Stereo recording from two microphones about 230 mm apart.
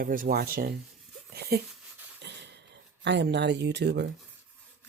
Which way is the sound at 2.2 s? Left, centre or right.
Right.